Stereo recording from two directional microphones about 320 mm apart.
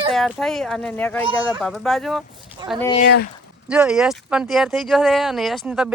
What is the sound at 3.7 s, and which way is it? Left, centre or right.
Speech, centre.